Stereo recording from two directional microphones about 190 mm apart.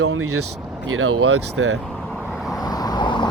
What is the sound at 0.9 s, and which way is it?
Speech, 90° right.